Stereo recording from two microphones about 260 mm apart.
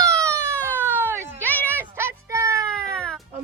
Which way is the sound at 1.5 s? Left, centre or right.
Centre.